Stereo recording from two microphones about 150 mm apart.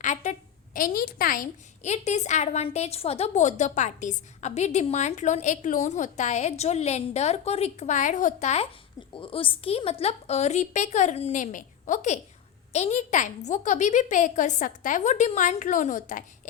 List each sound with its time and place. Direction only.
0.0 s a woman's voice: 55° left (ahead or behind)
1.9 s a woman's voice: 50° left (ahead or behind)
9.1 s a woman's voice: 35° left (ahead or behind); by 16.2 s 60° left (ahead or behind)